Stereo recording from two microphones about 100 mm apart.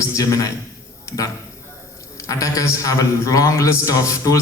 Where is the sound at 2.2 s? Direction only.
30° left (ahead or behind).